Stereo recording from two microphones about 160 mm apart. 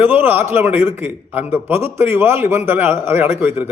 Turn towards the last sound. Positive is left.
turn(degrees=-15)  # may be behind; listen again after turning